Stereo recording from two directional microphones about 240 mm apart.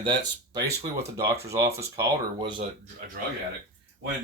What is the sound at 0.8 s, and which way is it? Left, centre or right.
Speech, centre.